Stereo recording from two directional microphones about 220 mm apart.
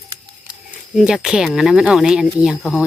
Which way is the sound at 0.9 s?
5° right (ahead or behind).